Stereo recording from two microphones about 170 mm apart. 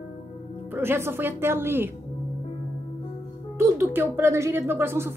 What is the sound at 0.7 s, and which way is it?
A woman's voice, 15° right (ahead or behind).